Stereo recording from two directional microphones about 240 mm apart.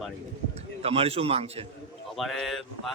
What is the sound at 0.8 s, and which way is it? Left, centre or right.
Speech, right.